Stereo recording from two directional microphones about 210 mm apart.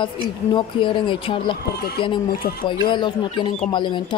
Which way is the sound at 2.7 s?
25° left (ahead or behind).